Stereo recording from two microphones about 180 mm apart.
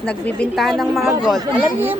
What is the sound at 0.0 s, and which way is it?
A woman's voice, 5° left (ahead or behind).